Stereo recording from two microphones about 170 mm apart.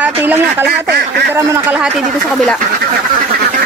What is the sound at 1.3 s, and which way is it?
Speech, 15° right (ahead or behind).